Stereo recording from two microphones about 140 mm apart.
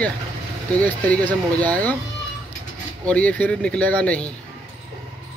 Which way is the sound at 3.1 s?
10° left (ahead or behind).